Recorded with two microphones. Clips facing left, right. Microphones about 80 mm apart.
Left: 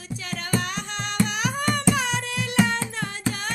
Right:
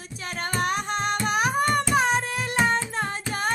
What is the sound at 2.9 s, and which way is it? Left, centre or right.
Singing, right.